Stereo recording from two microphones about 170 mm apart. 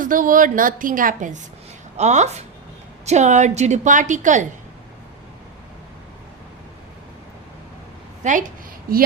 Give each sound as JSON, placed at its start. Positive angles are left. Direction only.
{"t": 0.0, "sound": "a woman's voice", "side_deg": -55}
{"t": 8.2, "sound": "a woman's voice", "side_deg": -50}